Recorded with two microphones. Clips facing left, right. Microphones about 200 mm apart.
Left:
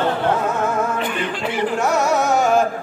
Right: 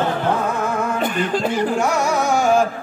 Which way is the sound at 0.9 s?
45° right (ahead or behind).